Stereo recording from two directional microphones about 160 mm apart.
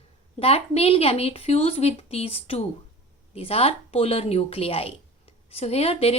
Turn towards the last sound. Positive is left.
turn(degrees=40)  # may be behind; listen again after turning